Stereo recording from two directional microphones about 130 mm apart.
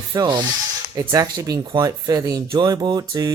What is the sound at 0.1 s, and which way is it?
Speech, 35° right (ahead or behind).